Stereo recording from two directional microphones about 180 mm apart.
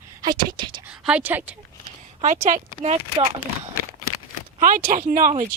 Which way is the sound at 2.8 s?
35° right (ahead or behind).